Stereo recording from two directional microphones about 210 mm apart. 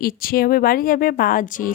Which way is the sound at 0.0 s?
45° left (ahead or behind).